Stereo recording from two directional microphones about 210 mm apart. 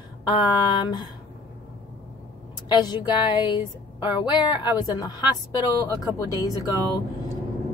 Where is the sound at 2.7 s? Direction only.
20° left (ahead or behind).